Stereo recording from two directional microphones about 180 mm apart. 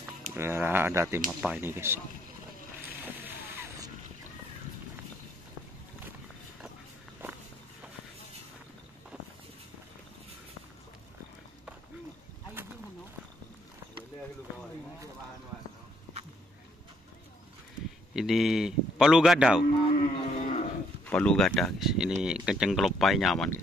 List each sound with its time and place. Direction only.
0.4 s speech: 15° right (ahead or behind)
3.0 s a sound: 10° right (ahead or behind)
18.1 s a man's voice: centre (ahead or behind)
20.0 s cattle: 40° left (ahead or behind)
21.1 s speech: 5° left (ahead or behind)